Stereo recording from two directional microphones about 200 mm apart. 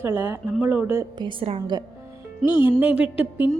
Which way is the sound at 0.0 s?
10° right (ahead or behind).